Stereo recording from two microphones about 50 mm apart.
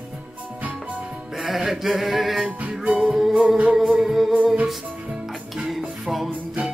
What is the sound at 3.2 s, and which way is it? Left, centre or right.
Music, centre.